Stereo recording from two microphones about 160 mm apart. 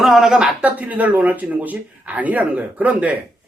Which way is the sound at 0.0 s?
Centre (ahead or behind).